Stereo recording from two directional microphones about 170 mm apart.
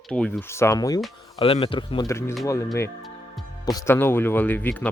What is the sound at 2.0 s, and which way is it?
Speech, 15° left (ahead or behind).